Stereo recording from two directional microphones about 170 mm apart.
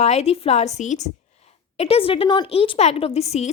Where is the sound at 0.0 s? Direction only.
40° left (ahead or behind).